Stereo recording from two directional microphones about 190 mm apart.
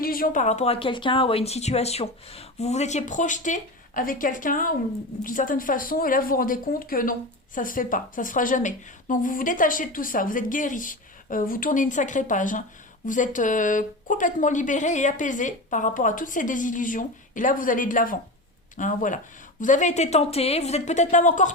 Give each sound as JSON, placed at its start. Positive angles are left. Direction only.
{"t": 0.0, "sound": "speech", "side_deg": 50}